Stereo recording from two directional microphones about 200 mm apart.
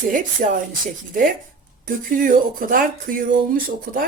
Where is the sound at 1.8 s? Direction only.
45° right (ahead or behind).